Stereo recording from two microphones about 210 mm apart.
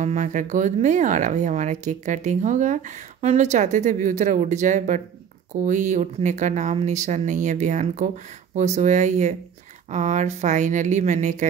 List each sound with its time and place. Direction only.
0.0 s speech: 35° right (ahead or behind)